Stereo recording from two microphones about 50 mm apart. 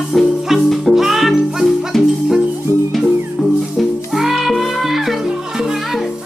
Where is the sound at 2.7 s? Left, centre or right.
Right.